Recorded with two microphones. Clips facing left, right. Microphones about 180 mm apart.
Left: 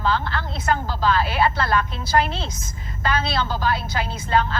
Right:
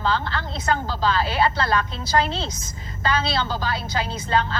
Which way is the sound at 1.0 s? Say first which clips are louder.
Left 1 dB; 30° right (ahead or behind).